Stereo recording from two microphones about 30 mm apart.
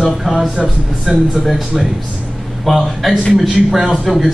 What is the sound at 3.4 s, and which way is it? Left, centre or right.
Speech, centre.